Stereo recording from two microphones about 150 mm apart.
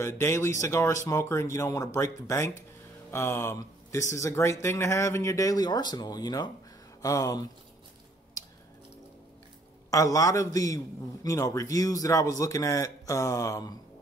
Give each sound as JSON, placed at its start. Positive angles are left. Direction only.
{"t": 0.0, "sound": "speech", "side_deg": 15}
{"t": 9.8, "sound": "speech", "side_deg": 25}